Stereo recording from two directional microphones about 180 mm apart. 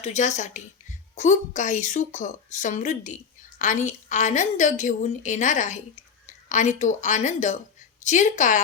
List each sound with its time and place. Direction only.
0.0 s a woman's voice: 40° left (ahead or behind)